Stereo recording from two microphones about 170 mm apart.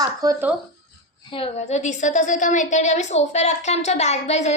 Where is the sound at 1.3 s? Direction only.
35° left (ahead or behind).